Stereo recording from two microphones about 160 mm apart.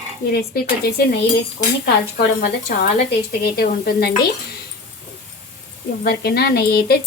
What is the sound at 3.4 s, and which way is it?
Speech, 75° left (ahead or behind).